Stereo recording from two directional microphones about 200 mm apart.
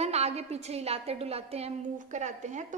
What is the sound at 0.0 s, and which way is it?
A woman's voice, 30° right (ahead or behind).